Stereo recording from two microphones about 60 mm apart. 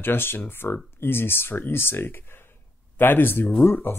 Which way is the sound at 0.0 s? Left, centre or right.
Left.